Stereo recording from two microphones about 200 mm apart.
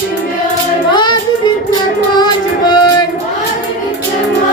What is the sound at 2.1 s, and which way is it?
Music, 20° left (ahead or behind).